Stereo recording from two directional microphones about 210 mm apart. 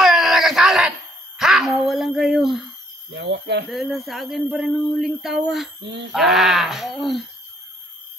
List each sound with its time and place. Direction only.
0.0 s a sound: centre (ahead or behind)
3.1 s speech: 55° right (ahead or behind)
3.6 s speech: centre (ahead or behind)